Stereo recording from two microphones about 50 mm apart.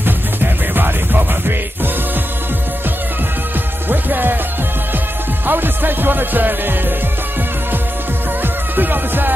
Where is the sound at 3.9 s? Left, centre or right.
Right.